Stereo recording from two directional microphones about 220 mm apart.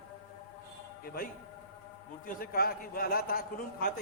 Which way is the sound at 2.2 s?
40° left (ahead or behind).